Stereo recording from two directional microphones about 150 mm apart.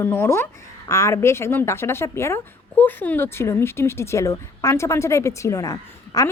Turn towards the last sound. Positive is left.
turn(degrees=20)  # may be behind; listen again after turning